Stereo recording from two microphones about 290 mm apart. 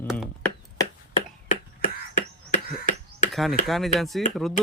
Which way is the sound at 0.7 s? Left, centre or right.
Left.